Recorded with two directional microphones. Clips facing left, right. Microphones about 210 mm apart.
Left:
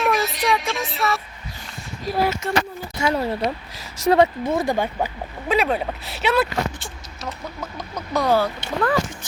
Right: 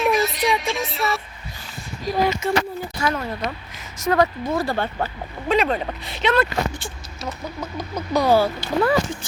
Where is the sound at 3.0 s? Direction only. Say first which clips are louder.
Left 4 dB; 30° left (ahead or behind); by 9.0 s 10° right (ahead or behind).